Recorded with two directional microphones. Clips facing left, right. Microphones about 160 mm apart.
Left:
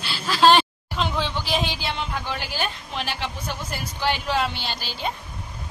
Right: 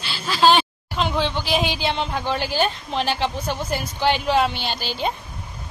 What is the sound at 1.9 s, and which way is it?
Speech, 30° right (ahead or behind).